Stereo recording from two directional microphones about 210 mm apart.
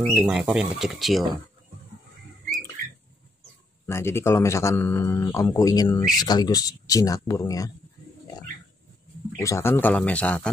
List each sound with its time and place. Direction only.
0.1 s speech: 5° right (ahead or behind)
3.8 s speech: 10° left (ahead or behind)
9.4 s speech: 15° left (ahead or behind)